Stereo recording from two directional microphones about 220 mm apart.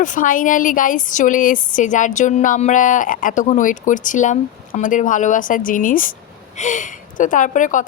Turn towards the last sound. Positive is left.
turn(degrees=35)  # may be behind; listen again after turning